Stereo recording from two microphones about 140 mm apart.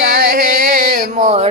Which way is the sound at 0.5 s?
75° right (ahead or behind).